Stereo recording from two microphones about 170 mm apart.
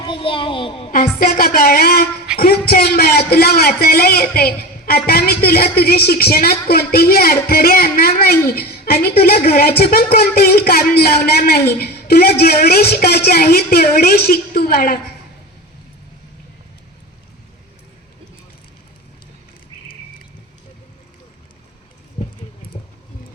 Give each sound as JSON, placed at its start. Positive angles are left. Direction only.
{"t": 0.0, "sound": "a child's voice", "side_deg": 30}
{"t": 0.9, "sound": "a man's voice", "side_deg": 60}
{"t": 22.2, "sound": "clip-clop", "side_deg": 35}